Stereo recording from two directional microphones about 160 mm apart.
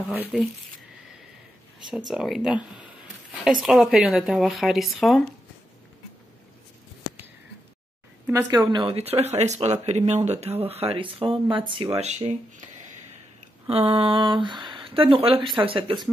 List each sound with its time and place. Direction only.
0.2 s speech: centre (ahead or behind)
1.9 s speech: 5° right (ahead or behind)
8.3 s speech: 20° right (ahead or behind)
8.7 s speech: 35° right (ahead or behind)
12.0 s speech: 45° right (ahead or behind)
13.7 s speech: 35° right (ahead or behind)